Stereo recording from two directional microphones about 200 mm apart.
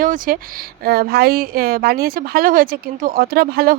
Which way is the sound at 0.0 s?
45° right (ahead or behind).